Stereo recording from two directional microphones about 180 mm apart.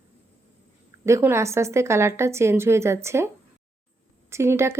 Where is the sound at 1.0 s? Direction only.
15° right (ahead or behind).